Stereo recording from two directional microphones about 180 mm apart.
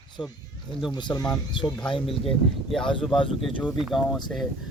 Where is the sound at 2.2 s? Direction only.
Centre (ahead or behind).